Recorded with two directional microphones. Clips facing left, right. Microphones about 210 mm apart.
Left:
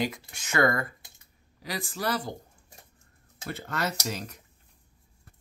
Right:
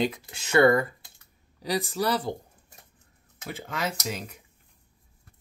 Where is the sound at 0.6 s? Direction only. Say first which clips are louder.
Right 6 dB; 30° right (ahead or behind).